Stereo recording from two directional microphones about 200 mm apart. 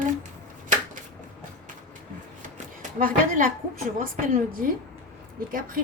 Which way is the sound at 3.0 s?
45° right (ahead or behind).